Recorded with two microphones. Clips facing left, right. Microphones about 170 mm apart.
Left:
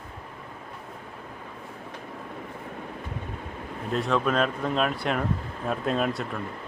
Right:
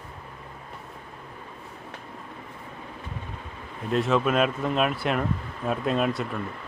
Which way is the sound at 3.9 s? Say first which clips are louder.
Right 2 dB; centre (ahead or behind).